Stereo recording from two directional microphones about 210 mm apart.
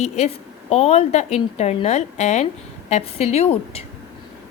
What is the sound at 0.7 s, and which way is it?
A woman's voice, 30° left (ahead or behind).